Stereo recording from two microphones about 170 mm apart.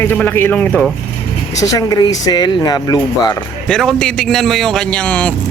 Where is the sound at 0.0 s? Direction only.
10° left (ahead or behind).